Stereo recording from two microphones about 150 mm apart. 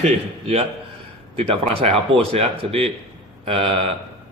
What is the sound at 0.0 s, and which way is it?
Speech, 45° right (ahead or behind).